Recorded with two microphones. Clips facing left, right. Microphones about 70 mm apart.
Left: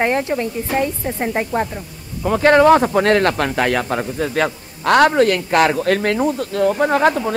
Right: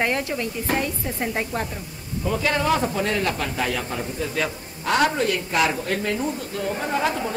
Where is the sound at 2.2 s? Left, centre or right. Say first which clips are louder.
Left 11 dB; left.